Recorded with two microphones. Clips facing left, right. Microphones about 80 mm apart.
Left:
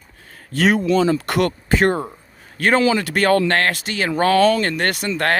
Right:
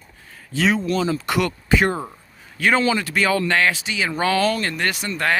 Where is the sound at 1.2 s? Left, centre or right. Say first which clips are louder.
Left 2 dB; left.